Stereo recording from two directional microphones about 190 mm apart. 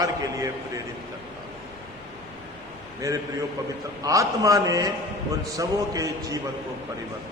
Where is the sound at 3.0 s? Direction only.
20° right (ahead or behind).